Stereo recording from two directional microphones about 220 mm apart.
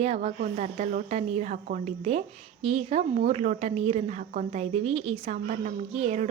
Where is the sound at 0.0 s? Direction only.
30° right (ahead or behind).